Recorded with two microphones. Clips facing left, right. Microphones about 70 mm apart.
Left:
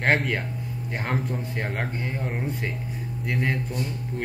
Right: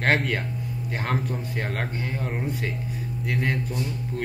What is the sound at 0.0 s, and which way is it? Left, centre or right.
Speech, centre.